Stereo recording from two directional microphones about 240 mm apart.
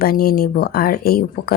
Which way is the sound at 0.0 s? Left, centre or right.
Left.